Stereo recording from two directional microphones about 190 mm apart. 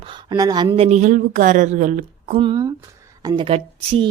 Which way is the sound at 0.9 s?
40° right (ahead or behind).